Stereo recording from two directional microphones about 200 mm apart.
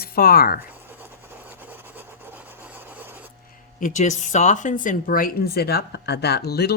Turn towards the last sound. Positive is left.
turn(degrees=50)  # may be behind; listen again after turning